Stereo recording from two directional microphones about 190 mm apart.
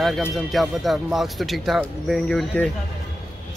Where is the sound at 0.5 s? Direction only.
Centre (ahead or behind).